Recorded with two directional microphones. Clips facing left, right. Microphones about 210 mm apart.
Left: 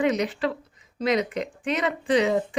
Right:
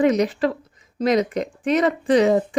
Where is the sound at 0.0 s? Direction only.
40° right (ahead or behind).